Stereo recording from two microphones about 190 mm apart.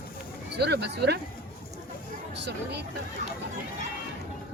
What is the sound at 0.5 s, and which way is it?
Speech, 60° right (ahead or behind).